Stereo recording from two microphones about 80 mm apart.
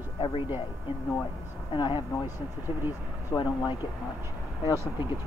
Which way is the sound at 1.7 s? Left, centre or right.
Left.